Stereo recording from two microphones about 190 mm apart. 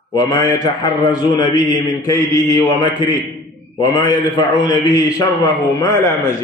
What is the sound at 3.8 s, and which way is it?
A man's voice, 20° left (ahead or behind).